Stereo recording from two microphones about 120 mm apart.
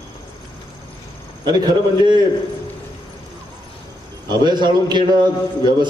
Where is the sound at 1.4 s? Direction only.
40° right (ahead or behind).